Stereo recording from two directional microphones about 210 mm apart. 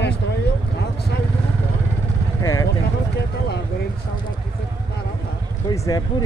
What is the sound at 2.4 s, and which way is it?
Speech, 15° left (ahead or behind).